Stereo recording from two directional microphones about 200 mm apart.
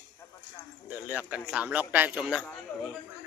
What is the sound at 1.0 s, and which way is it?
Speech, 5° right (ahead or behind).